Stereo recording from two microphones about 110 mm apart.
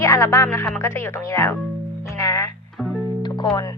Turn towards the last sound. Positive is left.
turn(degrees=35)  # may be behind; listen again after turning